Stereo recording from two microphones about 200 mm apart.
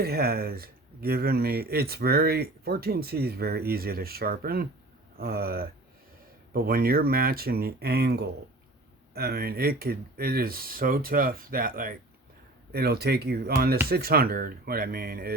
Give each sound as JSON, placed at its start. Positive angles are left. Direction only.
{"t": 0.0, "sound": "speech", "side_deg": -50}